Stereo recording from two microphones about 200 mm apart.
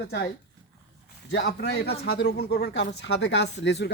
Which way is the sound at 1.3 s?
60° left (ahead or behind).